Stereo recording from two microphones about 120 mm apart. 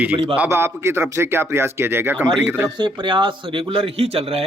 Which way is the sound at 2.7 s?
40° right (ahead or behind).